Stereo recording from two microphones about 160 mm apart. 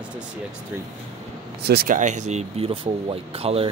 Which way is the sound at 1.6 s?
80° right.